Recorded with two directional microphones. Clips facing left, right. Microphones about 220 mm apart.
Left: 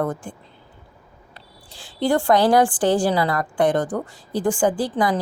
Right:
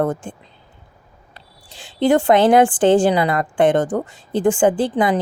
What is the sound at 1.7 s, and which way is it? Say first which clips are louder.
Speech: right 5 dB; 20° right (ahead or behind).